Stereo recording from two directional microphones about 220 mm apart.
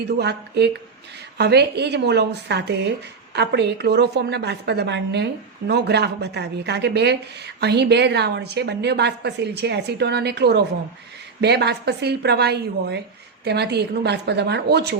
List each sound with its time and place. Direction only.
0.0 s a woman's voice: 50° right (ahead or behind)